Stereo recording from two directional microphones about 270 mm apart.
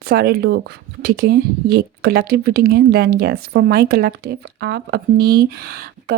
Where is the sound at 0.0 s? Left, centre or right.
Right.